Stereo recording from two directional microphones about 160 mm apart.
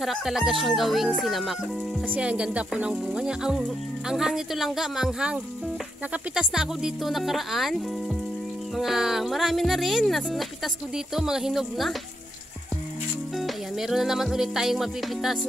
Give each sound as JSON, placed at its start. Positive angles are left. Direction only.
{"t": 0.0, "sound": "speech", "side_deg": 0}
{"t": 8.7, "sound": "speech", "side_deg": 0}
{"t": 13.4, "sound": "music", "side_deg": 0}